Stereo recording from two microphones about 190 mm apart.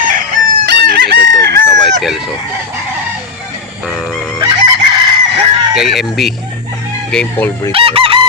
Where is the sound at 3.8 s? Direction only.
Centre (ahead or behind).